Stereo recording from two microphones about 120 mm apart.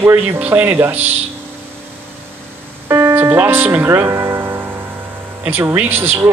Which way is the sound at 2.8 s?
20° right (ahead or behind).